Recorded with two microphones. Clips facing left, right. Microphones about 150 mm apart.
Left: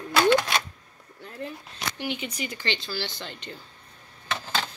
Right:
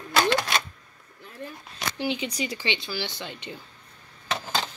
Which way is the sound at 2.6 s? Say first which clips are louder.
Right 1 dB; 15° right (ahead or behind).